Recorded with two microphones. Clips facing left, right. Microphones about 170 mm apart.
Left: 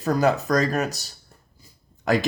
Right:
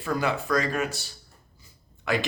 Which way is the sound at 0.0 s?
40° left (ahead or behind).